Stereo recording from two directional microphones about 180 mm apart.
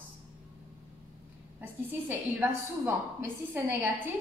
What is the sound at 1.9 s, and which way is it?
A woman's voice, 15° right (ahead or behind).